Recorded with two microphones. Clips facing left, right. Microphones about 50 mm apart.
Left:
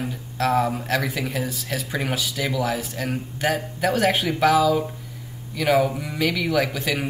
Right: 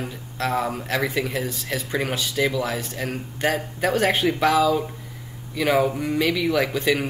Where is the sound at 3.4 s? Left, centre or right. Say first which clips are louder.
Right 1 dB; right.